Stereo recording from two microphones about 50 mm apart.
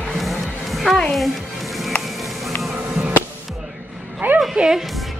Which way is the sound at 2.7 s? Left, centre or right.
Right.